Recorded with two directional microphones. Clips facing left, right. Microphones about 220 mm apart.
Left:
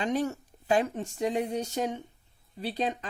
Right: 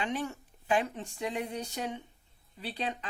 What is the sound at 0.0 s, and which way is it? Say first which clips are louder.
Speech: left 6 dB; 40° left (ahead or behind).